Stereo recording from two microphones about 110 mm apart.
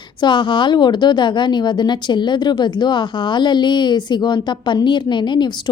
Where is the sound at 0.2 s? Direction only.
45° left (ahead or behind).